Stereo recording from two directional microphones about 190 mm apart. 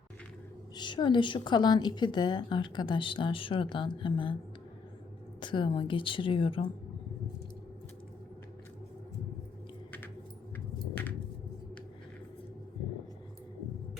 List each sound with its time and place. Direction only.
0.8 s a woman's voice: 25° left (ahead or behind)
5.4 s a woman's voice: 25° left (ahead or behind)